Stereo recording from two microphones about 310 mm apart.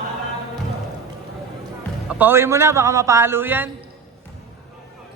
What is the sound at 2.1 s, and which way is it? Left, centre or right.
A man's voice, centre.